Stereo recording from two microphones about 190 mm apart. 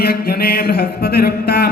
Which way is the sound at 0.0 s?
55° left (ahead or behind).